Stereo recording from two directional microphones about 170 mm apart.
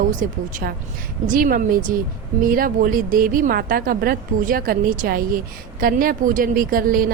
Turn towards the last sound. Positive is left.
turn(degrees=-60)  # may be behind; listen again after turning